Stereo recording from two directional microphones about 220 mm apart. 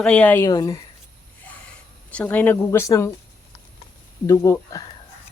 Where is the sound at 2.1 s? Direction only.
5° left (ahead or behind).